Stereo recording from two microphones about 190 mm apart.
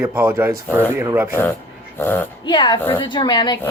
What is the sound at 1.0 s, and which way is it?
Speech, 15° right (ahead or behind).